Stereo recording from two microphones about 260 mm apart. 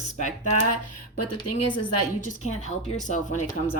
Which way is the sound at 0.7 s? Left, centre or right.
Left.